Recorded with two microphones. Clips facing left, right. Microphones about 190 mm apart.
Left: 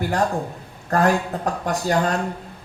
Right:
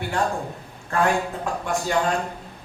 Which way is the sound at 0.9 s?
40° left (ahead or behind).